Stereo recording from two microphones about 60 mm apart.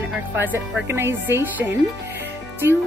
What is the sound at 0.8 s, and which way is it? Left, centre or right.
Speech, right.